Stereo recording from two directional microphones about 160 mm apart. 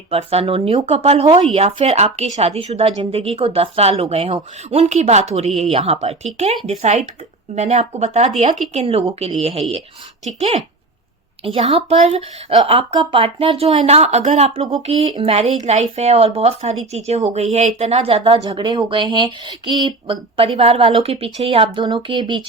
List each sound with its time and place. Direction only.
0.1 s speech: 40° right (ahead or behind)
11.4 s speech: 35° right (ahead or behind)